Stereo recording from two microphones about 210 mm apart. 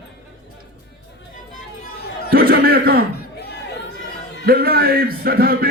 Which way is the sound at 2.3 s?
45° right (ahead or behind).